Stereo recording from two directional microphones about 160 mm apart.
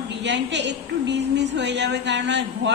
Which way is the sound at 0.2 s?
90° right.